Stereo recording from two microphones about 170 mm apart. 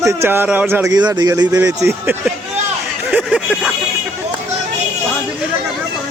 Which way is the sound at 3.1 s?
5° right (ahead or behind).